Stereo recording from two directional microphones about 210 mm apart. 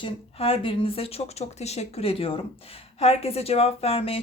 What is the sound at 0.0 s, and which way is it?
Speech, 25° left (ahead or behind).